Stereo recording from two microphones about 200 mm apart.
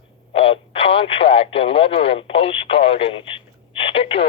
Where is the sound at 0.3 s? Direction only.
30° left (ahead or behind).